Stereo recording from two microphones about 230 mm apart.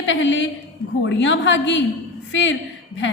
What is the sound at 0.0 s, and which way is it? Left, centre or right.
A woman's voice, left.